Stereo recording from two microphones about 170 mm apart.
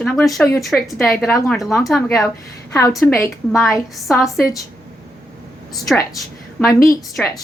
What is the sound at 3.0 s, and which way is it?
Speech, 15° left (ahead or behind).